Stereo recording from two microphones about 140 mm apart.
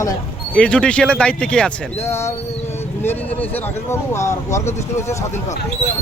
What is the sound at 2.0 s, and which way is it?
Speech, 20° left (ahead or behind).